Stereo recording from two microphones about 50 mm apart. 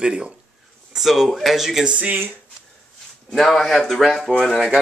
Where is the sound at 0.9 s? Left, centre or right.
Centre.